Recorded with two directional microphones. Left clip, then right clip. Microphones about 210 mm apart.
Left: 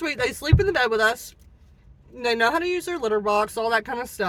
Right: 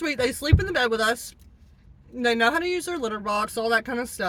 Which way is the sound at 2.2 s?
15° right (ahead or behind).